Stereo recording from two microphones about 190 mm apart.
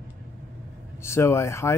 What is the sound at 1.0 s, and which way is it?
Speech, 15° left (ahead or behind).